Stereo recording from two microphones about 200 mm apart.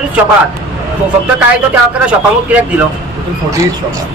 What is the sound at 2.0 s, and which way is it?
Speech, 5° right (ahead or behind).